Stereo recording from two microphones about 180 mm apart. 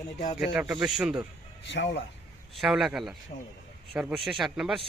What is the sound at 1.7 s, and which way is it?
Speech, 80° left.